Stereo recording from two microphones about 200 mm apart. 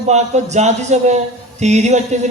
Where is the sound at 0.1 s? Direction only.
35° right (ahead or behind).